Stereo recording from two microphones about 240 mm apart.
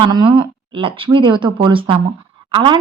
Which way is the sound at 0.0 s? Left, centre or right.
Centre.